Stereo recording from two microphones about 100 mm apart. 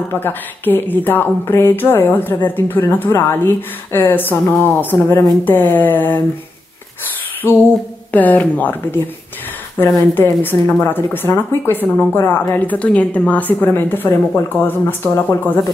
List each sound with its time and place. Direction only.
0.1 s speech: 20° left (ahead or behind)
7.4 s speech: 25° left (ahead or behind)